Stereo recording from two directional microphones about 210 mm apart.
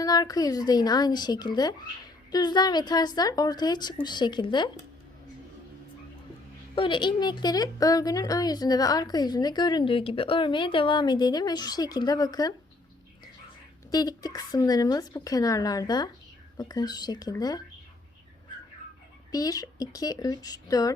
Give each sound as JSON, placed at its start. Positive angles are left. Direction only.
{"t": 0.0, "sound": "a woman's voice", "side_deg": 20}
{"t": 6.7, "sound": "a woman's voice", "side_deg": 25}
{"t": 13.9, "sound": "a woman's voice", "side_deg": 20}
{"t": 19.3, "sound": "speech", "side_deg": 15}